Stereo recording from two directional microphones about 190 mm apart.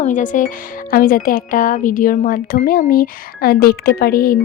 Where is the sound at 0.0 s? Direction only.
40° left (ahead or behind).